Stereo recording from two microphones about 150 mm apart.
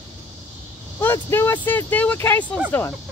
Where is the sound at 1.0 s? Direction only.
15° left (ahead or behind).